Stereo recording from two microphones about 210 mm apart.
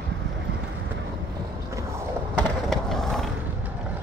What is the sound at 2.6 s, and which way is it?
Skateboard, centre (ahead or behind).